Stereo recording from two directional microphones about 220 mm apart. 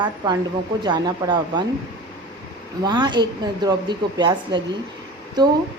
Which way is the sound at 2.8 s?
20° right (ahead or behind).